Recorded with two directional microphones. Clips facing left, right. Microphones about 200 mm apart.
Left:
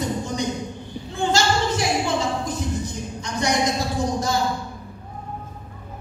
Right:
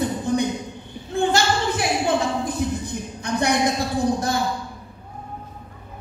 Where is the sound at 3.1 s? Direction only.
60° right (ahead or behind).